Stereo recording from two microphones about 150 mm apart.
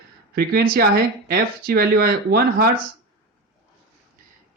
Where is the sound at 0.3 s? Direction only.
80° right.